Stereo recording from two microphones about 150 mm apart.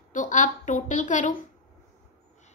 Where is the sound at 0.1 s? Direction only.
55° left (ahead or behind).